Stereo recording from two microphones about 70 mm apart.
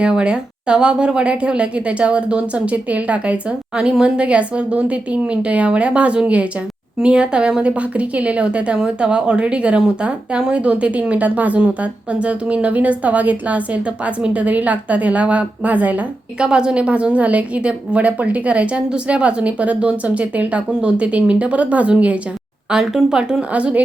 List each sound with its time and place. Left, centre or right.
0.0 s a woman's voice: centre